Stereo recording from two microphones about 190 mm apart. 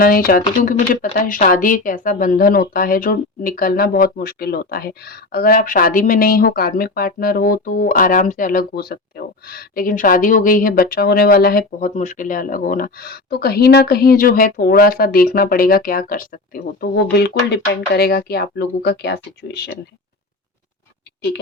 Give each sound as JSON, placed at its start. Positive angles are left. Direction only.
{"t": 0.0, "sound": "speech", "side_deg": 50}
{"t": 16.9, "sound": "speech", "side_deg": 60}